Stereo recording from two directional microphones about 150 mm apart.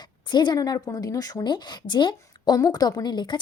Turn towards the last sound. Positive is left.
turn(degrees=30)  # may be behind; listen again after turning